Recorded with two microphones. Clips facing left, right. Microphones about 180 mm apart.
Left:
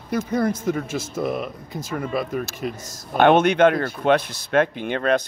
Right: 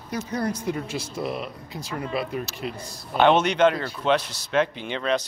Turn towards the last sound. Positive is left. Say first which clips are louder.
# left 4 dB
turn(degrees=55)  # may be behind; listen again after turning